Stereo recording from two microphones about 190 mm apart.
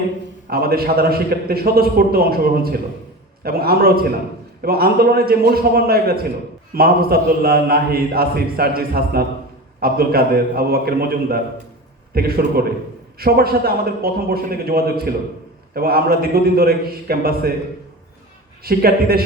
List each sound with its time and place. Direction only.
0.5 s a man's voice: 55° right (ahead or behind)
18.6 s a man's voice: 55° right (ahead or behind)